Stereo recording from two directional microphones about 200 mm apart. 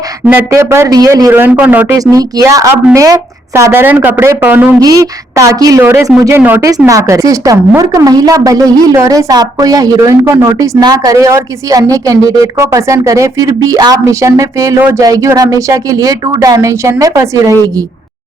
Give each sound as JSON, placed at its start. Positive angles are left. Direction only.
{"t": 0.3, "sound": "a woman's voice", "side_deg": -10}